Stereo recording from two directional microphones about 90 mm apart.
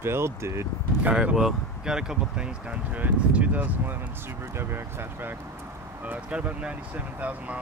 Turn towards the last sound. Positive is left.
turn(degrees=-15)  # may be behind; listen again after turning